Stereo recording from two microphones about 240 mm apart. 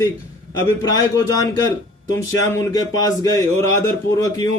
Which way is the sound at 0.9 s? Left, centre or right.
Centre.